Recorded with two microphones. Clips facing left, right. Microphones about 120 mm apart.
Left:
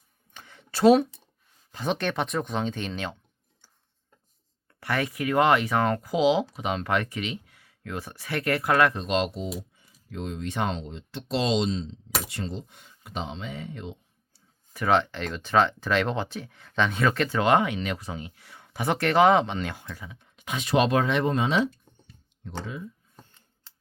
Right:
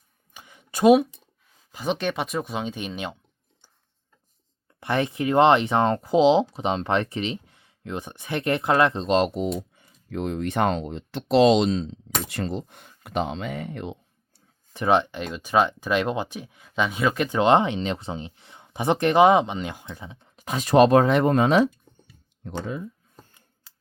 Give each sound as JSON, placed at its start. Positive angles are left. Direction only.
{"t": 0.3, "sound": "a sound", "side_deg": -15}
{"t": 1.7, "sound": "speech", "side_deg": -5}
{"t": 4.7, "sound": "speech", "side_deg": -20}
{"t": 9.7, "sound": "speech", "side_deg": -60}
{"t": 14.7, "sound": "speech", "side_deg": -20}
{"t": 21.7, "sound": "a sound", "side_deg": -10}
{"t": 22.4, "sound": "speech", "side_deg": -50}